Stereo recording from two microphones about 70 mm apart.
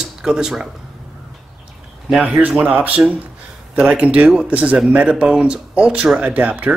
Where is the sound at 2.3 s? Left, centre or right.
Right.